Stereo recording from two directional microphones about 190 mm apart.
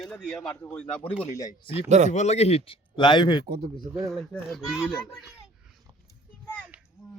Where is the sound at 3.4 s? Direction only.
55° right (ahead or behind).